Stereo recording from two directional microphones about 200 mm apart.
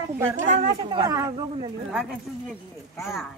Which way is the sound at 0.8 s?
20° right (ahead or behind).